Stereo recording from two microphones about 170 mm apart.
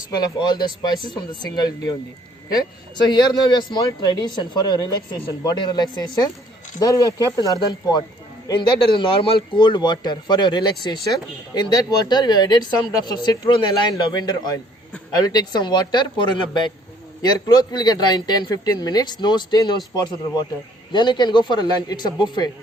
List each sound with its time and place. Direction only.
0.1 s speech: 25° left (ahead or behind)
3.0 s speech: 25° left (ahead or behind)